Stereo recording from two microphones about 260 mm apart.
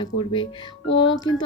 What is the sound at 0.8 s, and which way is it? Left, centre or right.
Music, left.